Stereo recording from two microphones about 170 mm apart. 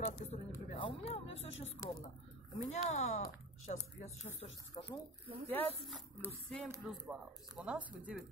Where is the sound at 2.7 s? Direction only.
40° left (ahead or behind).